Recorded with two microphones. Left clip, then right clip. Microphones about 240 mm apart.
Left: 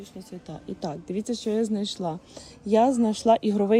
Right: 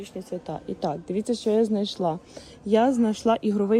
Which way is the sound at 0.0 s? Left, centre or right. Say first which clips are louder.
Right 8 dB; centre.